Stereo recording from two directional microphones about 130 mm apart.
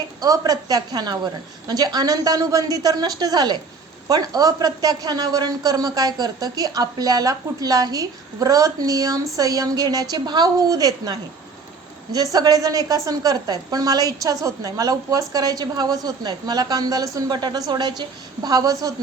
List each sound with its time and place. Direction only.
0.2 s a woman's voice: 30° right (ahead or behind)